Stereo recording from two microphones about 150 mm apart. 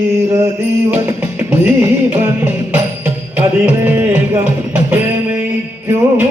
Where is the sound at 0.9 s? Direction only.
15° right (ahead or behind).